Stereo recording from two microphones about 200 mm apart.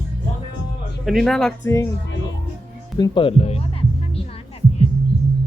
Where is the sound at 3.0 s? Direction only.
20° left (ahead or behind).